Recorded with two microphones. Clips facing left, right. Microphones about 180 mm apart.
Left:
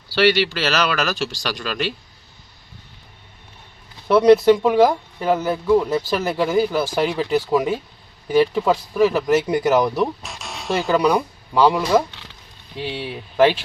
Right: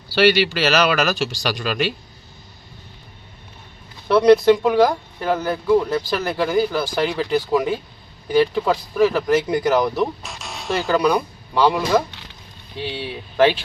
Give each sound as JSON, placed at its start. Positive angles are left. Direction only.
{"t": 0.1, "sound": "speech", "side_deg": -10}
{"t": 4.1, "sound": "speech", "side_deg": 10}
{"t": 8.4, "sound": "speech", "side_deg": 10}